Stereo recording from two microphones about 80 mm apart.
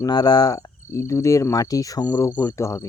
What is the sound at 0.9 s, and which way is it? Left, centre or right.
Speech, left.